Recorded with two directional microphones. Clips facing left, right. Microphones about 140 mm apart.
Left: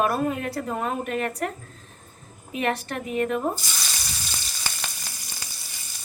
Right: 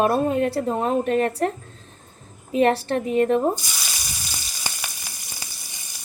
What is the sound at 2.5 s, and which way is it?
Speech, 35° right (ahead or behind).